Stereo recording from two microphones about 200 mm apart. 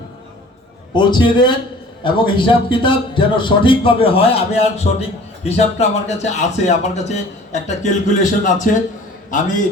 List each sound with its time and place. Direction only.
0.9 s a man's voice: 20° left (ahead or behind); by 8.8 s 40° left (ahead or behind)